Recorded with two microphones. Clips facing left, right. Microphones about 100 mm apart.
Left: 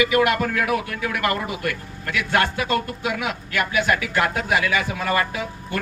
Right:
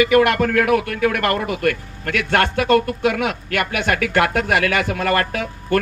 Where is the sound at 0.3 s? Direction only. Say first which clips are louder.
Right 6 dB; 65° right (ahead or behind).